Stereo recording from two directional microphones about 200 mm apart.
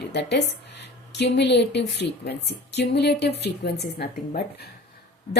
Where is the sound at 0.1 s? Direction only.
55° left (ahead or behind).